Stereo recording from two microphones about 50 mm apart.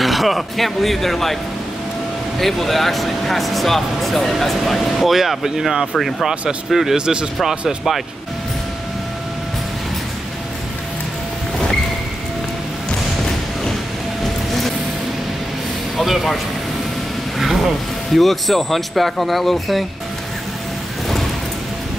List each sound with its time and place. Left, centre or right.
0.0 s speech: centre
5.9 s speech: centre
16.0 s speech: centre
17.4 s speech: centre